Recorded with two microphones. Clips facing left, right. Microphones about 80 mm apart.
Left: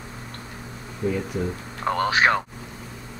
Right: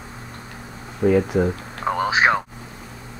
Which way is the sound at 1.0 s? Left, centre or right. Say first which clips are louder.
Right 9 dB; right.